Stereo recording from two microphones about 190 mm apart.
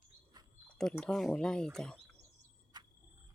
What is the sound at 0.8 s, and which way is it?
Speech, 5° left (ahead or behind).